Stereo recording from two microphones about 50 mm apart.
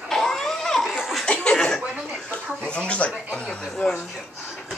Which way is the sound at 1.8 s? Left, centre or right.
Centre.